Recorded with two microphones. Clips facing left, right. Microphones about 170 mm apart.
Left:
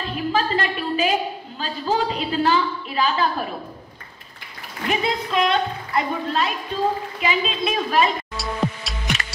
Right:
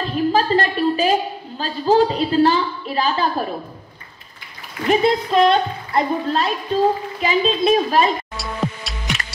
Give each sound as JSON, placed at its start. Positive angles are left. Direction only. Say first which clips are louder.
{"t": 0.1, "sound": "a sound", "louder": "right 5 dB", "side_deg": -40}
{"t": 1.6, "sound": "a woman's voice", "louder": "right 7 dB", "side_deg": -40}
{"t": 4.8, "sound": "a woman's voice", "louder": "right 7 dB", "side_deg": -35}
{"t": 8.4, "sound": "music", "louder": "even", "side_deg": 0}